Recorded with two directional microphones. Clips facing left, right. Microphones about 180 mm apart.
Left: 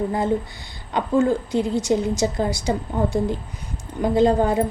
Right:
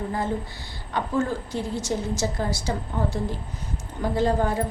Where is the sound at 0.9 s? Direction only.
20° left (ahead or behind).